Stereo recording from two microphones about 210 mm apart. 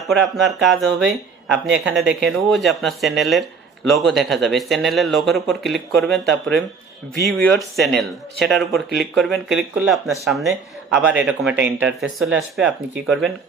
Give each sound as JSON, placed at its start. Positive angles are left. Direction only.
{"t": 0.1, "sound": "speech", "side_deg": 0}
{"t": 7.3, "sound": "speech", "side_deg": 0}